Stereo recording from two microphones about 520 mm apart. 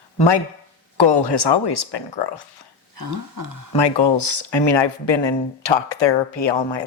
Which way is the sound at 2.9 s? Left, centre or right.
Right.